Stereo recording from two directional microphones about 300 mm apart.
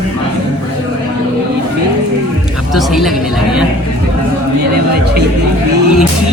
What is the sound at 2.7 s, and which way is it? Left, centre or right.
Speech, centre.